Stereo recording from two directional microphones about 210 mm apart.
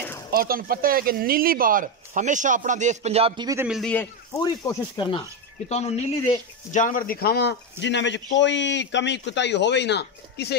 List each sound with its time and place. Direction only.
0.3 s speech: 45° right (ahead or behind); by 3.6 s 20° right (ahead or behind)
3.6 s a man's voice: centre (ahead or behind)
4.4 s speech: 20° left (ahead or behind)
5.7 s a man's voice: 30° left (ahead or behind); by 10.6 s 50° left (ahead or behind)